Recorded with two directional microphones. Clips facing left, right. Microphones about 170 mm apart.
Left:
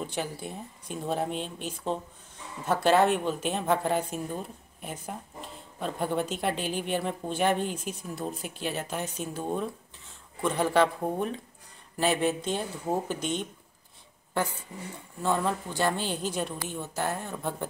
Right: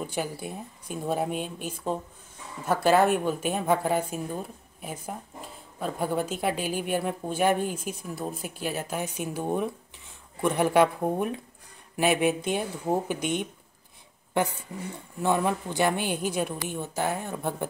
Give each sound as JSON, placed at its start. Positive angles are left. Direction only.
{"t": 0.0, "sound": "a woman's voice", "side_deg": -10}